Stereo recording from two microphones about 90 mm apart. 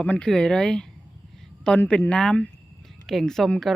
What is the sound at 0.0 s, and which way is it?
Speech, 10° left (ahead or behind).